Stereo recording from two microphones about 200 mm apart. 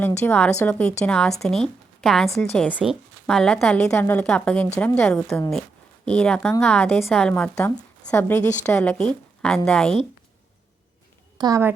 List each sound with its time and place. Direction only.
0.0 s a woman's voice: 10° left (ahead or behind)
11.3 s a woman's voice: 15° right (ahead or behind)